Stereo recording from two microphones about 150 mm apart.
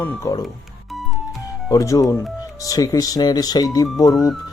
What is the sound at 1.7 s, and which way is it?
Speech, 20° left (ahead or behind).